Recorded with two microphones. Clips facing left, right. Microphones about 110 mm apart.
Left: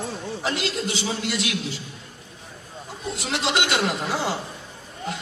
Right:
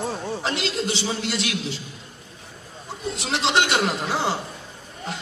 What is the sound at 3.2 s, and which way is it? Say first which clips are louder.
A man's voice: right 3 dB; 30° right (ahead or behind).